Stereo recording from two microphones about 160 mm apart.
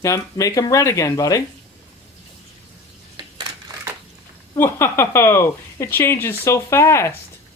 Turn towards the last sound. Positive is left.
turn(degrees=15)  # may be behind; listen again after turning